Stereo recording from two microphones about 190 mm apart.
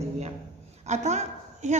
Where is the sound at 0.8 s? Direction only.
35° right (ahead or behind).